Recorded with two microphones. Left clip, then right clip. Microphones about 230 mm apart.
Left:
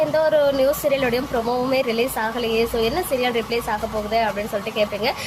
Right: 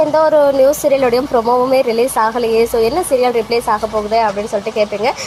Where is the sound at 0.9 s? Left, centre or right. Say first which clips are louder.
Right 8 dB; centre.